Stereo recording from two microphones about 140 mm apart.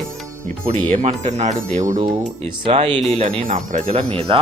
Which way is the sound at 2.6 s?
40° right (ahead or behind).